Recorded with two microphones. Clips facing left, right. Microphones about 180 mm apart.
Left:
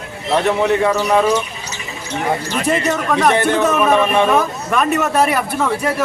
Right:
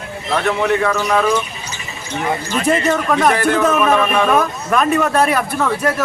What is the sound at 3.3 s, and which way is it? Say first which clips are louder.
Speech: left 1 dB; 30° left (ahead or behind).